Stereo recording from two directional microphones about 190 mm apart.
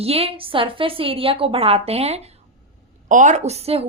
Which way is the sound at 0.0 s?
30° right (ahead or behind).